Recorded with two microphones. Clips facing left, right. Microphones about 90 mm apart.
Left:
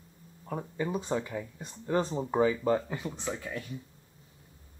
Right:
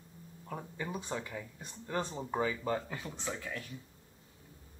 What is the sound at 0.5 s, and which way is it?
Speech, 15° left (ahead or behind).